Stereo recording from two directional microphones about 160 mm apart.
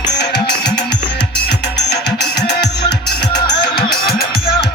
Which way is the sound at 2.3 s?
90° left.